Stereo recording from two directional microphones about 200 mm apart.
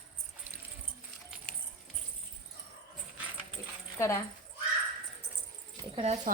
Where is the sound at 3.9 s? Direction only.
15° left (ahead or behind).